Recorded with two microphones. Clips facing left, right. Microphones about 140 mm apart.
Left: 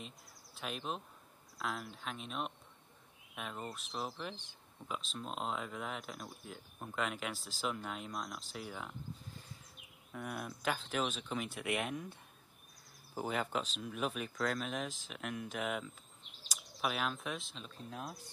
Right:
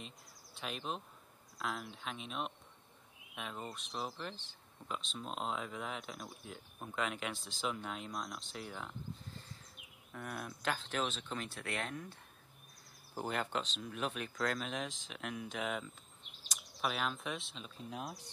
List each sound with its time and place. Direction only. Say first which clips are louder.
0.6 s speech: left 1 dB; centre (ahead or behind)
10.1 s speech: left 2 dB; centre (ahead or behind)
11.4 s speech: left 4 dB; 15° left (ahead or behind)
13.1 s speech: left 1 dB; centre (ahead or behind)